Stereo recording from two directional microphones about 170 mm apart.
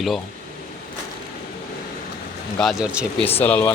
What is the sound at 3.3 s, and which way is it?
Speech, 10° left (ahead or behind).